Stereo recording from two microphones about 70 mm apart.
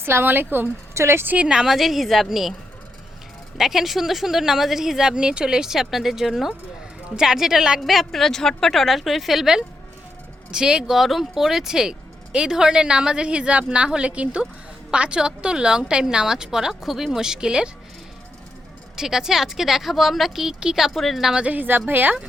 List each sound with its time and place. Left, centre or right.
0.0 s speech: right
0.9 s speech: right
1.5 s speech: centre
3.6 s speech: centre
18.9 s speech: centre
21.4 s speech: right